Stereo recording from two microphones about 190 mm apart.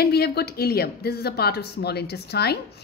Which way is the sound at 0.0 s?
55° left (ahead or behind).